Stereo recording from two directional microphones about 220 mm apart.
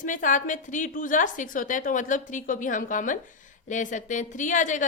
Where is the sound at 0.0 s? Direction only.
35° left (ahead or behind).